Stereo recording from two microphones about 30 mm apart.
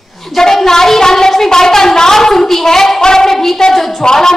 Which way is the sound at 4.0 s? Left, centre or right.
Centre.